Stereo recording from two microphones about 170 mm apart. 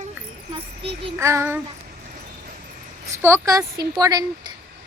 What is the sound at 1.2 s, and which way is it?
Speech, 15° right (ahead or behind).